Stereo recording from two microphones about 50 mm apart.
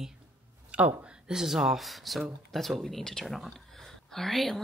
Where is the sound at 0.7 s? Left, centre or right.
Right.